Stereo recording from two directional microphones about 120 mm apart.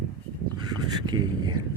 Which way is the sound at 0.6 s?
35° right (ahead or behind).